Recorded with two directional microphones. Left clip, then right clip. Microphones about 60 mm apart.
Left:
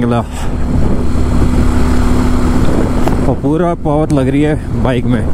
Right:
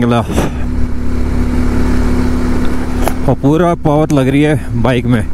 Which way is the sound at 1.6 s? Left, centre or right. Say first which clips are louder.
Left 1 dB; left.